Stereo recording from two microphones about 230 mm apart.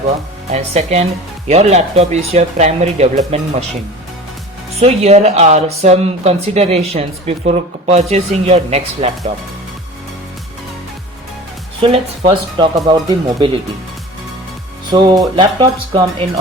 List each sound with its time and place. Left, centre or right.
0.5 s speech: right
4.8 s speech: right
11.8 s speech: right
14.9 s speech: centre